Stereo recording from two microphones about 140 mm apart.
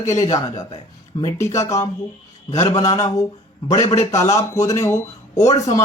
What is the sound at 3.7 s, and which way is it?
Speech, 50° left (ahead or behind).